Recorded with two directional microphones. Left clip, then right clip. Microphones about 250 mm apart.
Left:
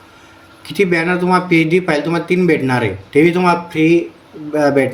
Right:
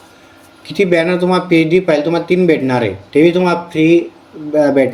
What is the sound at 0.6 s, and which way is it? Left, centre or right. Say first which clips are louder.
Speech: right 2 dB; centre.